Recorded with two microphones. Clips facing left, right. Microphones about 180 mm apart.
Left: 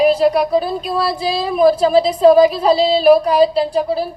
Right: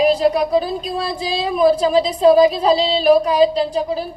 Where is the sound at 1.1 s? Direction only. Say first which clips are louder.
Left 2 dB; 35° left (ahead or behind).